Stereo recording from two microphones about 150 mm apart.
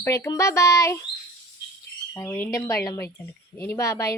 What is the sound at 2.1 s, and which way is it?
Speech, 15° left (ahead or behind).